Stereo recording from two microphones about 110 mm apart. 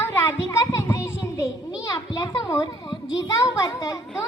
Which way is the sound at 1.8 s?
35° left (ahead or behind).